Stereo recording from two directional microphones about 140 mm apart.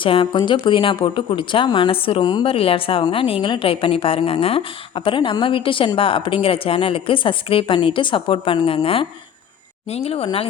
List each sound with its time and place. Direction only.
0.0 s speech: 40° left (ahead or behind)